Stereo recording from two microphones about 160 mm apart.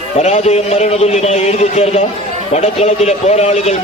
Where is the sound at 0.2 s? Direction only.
45° left (ahead or behind).